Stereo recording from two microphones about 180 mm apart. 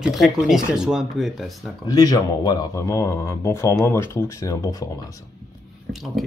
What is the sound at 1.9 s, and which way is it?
Speech, 20° left (ahead or behind).